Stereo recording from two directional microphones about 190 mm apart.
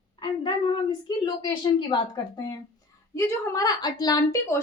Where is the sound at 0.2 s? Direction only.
25° left (ahead or behind).